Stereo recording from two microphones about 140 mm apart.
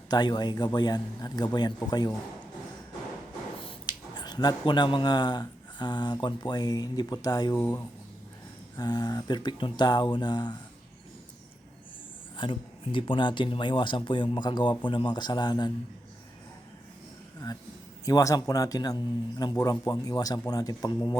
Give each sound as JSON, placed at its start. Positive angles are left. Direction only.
{"t": 0.1, "sound": "speech", "side_deg": 30}
{"t": 3.6, "sound": "speech", "side_deg": 35}
{"t": 7.5, "sound": "speech", "side_deg": 15}
{"t": 8.7, "sound": "speech", "side_deg": 30}
{"t": 12.4, "sound": "speech", "side_deg": 35}
{"t": 18.0, "sound": "a man's voice", "side_deg": 25}